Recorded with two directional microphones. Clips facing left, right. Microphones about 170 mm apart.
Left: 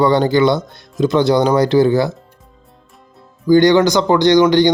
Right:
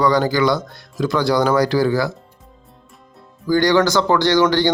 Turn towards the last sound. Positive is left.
turn(degrees=20)  # may be behind; listen again after turning